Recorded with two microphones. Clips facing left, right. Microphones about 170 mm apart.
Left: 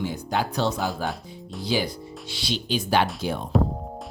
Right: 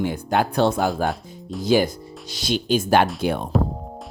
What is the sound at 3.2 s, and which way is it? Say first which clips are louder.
Speech: right 5 dB; 60° right (ahead or behind).